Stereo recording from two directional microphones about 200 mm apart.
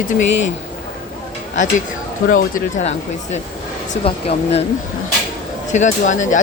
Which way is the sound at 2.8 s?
35° left (ahead or behind).